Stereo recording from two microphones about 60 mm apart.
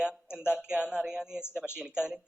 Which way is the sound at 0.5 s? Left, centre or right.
Centre.